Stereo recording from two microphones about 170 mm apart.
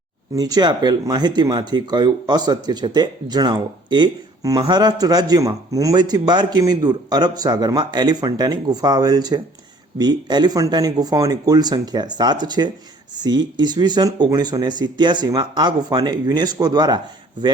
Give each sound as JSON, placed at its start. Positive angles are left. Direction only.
{"t": 0.3, "sound": "a man's voice", "side_deg": -20}